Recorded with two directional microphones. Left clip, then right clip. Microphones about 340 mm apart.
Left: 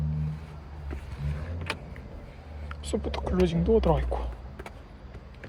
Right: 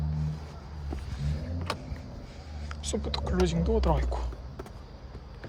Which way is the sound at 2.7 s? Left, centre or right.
Centre.